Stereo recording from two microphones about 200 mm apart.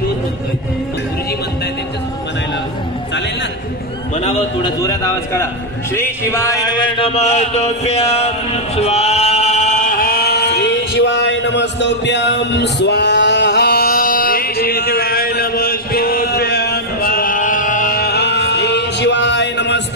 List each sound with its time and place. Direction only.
4.2 s a sound: 30° left (ahead or behind)
4.8 s a man's voice: 15° left (ahead or behind)
5.9 s mantra: 15° left (ahead or behind); by 19.8 s 60° left (ahead or behind)